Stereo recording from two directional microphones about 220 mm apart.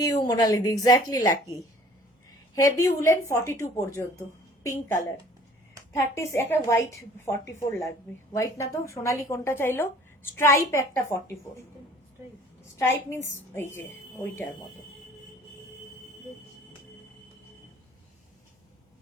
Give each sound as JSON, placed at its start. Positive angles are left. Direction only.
{"t": 0.0, "sound": "a woman's voice", "side_deg": 15}
{"t": 2.6, "sound": "a woman's voice", "side_deg": 15}
{"t": 12.8, "sound": "a woman's voice", "side_deg": 10}